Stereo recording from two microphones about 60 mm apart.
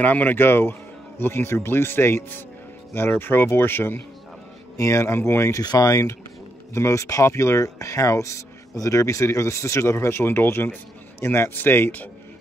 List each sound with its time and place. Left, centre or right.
0.0 s speech: left
4.7 s speech: left
5.8 s speech: left
6.7 s speech: left